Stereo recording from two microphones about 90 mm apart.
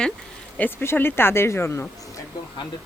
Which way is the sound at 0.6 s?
25° left (ahead or behind).